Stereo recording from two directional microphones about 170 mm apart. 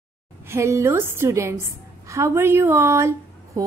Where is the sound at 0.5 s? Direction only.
15° right (ahead or behind).